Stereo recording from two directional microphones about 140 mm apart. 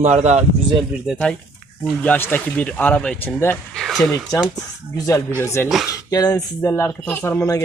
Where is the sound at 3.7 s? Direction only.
Centre (ahead or behind).